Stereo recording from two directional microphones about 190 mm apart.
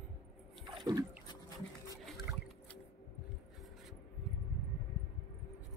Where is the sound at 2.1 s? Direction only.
Centre (ahead or behind).